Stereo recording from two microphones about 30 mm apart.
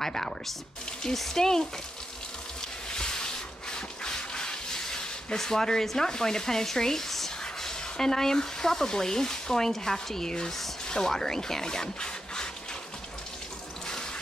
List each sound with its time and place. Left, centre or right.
0.0 s speech: centre
2.9 s a sound: left
5.4 s speech: centre